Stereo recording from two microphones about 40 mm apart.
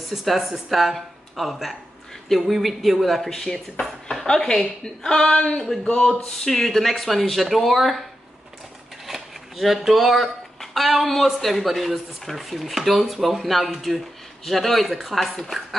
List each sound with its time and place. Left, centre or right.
0.1 s speech: centre; by 6.1 s left
6.2 s speech: centre
9.0 s speech: centre